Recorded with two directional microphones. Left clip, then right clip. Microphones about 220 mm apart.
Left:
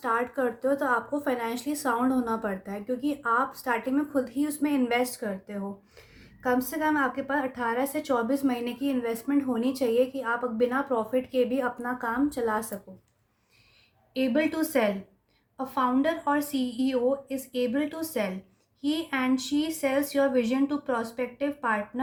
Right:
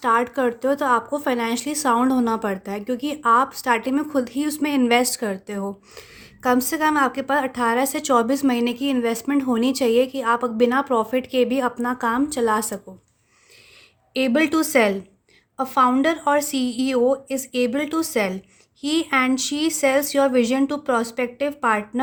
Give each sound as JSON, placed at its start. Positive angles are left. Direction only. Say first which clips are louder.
{"t": 0.0, "sound": "speech", "louder": "right 8 dB", "side_deg": -40}
{"t": 14.1, "sound": "speech", "louder": "right 7 dB", "side_deg": -50}